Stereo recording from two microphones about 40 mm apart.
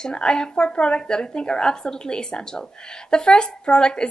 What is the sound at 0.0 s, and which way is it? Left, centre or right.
A woman's voice, left.